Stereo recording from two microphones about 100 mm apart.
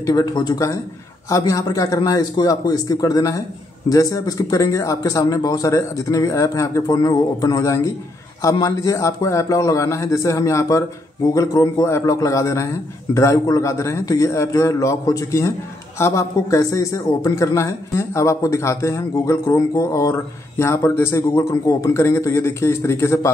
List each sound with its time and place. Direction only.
0.0 s a man's voice: 40° left (ahead or behind)